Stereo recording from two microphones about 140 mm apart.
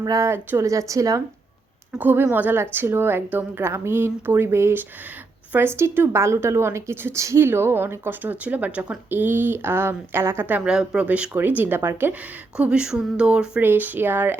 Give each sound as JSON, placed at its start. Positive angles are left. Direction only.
{"t": 0.0, "sound": "a woman's voice", "side_deg": -25}
{"t": 10.6, "sound": "a woman's voice", "side_deg": -5}